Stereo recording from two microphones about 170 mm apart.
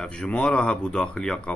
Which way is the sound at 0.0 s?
5° left (ahead or behind).